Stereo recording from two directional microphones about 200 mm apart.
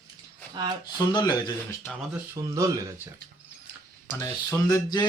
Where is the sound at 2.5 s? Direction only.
15° right (ahead or behind).